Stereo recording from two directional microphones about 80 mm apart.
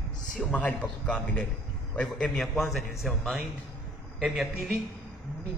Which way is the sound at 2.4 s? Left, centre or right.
Centre.